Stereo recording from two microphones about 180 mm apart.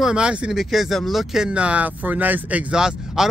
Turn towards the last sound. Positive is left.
turn(degrees=-5)  # may be behind; listen again after turning